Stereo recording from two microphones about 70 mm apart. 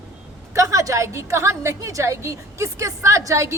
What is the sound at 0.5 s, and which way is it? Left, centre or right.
A woman's voice, right.